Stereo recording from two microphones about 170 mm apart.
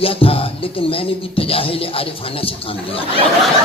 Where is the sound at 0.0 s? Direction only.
35° left (ahead or behind).